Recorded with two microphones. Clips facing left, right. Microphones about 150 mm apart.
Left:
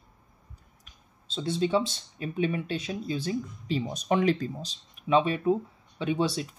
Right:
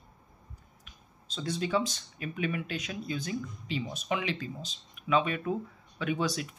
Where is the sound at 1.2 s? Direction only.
25° left (ahead or behind).